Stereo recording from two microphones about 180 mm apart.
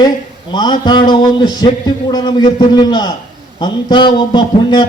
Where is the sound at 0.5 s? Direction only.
25° left (ahead or behind).